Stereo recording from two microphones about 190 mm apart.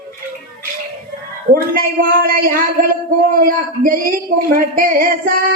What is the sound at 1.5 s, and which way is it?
Speech, 50° right (ahead or behind).